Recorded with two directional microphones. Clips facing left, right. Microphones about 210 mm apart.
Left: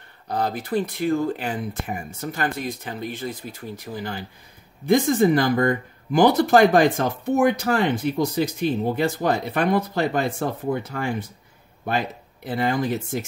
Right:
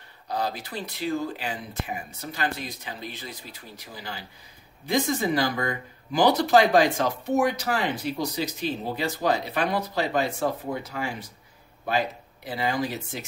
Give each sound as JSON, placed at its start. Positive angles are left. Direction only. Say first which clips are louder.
{"t": 0.3, "sound": "speech", "louder": "left 6 dB", "side_deg": 50}
{"t": 12.4, "sound": "speech", "louder": "left 5 dB", "side_deg": 50}